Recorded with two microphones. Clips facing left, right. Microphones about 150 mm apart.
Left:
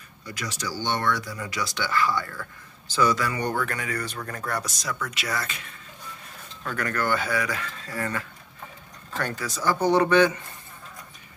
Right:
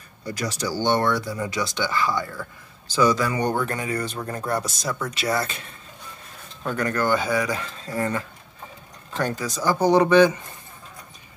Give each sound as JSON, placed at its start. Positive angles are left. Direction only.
{"t": 0.3, "sound": "speech", "side_deg": -35}